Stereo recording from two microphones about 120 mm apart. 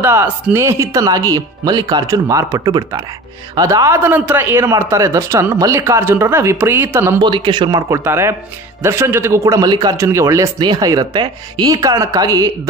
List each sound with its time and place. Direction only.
0.0 s a man's voice: 20° right (ahead or behind)
7.2 s speech: 40° right (ahead or behind)
7.9 s a man's voice: 20° right (ahead or behind)